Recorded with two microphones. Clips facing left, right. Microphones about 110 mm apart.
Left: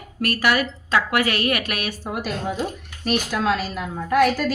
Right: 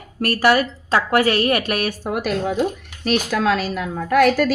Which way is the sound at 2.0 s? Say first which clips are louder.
Right 5 dB; 65° right (ahead or behind).